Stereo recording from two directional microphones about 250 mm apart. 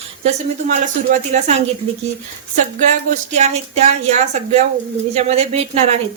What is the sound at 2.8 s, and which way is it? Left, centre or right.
A woman's voice, right.